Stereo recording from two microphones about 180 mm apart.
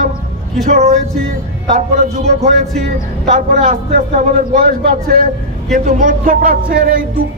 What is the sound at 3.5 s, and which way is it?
Music, 50° right (ahead or behind).